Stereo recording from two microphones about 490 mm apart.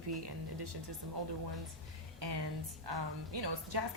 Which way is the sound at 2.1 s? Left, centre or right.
Right.